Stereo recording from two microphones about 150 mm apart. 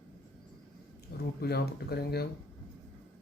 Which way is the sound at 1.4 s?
90° left.